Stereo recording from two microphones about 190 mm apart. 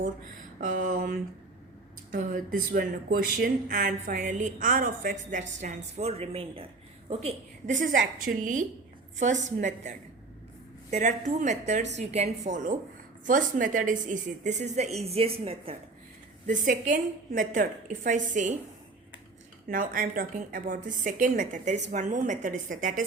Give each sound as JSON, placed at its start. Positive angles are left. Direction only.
{"t": 0.6, "sound": "a woman's voice", "side_deg": -45}
{"t": 10.9, "sound": "a woman's voice", "side_deg": -40}
{"t": 16.5, "sound": "a woman's voice", "side_deg": -40}
{"t": 19.6, "sound": "a woman's voice", "side_deg": -45}